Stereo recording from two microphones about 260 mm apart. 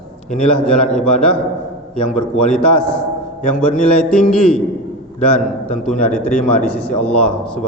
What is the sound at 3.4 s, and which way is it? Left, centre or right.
Speech, left.